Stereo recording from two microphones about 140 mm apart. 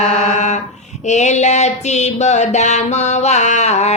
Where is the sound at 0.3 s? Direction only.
55° left (ahead or behind).